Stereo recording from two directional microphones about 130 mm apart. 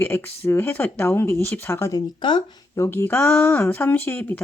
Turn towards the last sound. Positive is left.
turn(degrees=15)  # may be behind; listen again after turning